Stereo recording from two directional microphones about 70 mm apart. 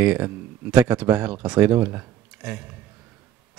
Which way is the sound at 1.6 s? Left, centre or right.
Right.